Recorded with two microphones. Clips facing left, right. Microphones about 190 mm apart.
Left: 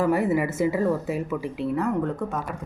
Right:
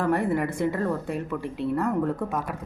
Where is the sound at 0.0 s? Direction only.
5° left (ahead or behind).